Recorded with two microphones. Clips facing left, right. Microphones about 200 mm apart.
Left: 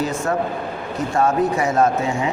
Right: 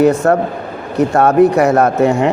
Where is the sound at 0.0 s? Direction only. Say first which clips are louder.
Right 10 dB; 65° right (ahead or behind).